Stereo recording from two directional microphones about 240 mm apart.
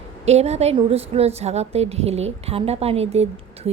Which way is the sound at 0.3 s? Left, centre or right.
Right.